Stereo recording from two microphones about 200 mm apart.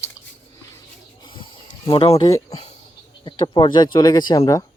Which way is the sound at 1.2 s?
25° left (ahead or behind).